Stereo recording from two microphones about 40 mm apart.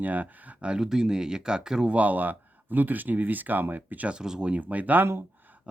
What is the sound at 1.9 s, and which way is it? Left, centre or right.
Speech, right.